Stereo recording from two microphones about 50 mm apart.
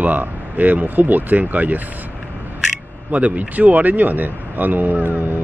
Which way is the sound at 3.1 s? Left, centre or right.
Right.